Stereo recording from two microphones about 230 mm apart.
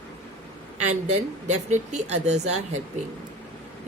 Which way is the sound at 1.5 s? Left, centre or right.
Right.